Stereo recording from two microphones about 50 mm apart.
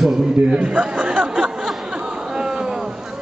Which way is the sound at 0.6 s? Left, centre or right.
Right.